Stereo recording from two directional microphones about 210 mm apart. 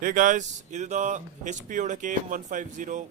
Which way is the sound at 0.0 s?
40° right (ahead or behind).